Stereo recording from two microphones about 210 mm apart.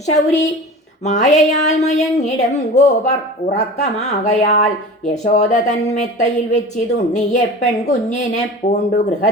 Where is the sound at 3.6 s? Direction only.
35° left (ahead or behind).